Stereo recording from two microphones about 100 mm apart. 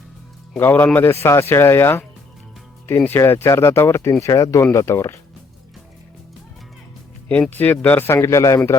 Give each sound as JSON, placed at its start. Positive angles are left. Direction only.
{"t": 0.5, "sound": "speech", "side_deg": 20}
{"t": 7.5, "sound": "speech", "side_deg": 20}
{"t": 8.1, "sound": "speech", "side_deg": 30}